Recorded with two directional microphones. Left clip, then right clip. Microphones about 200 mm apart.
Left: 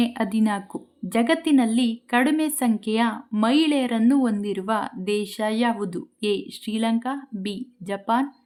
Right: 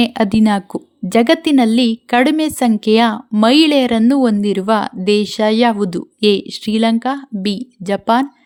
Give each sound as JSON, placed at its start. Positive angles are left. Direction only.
{"t": 0.0, "sound": "a woman's voice", "side_deg": -30}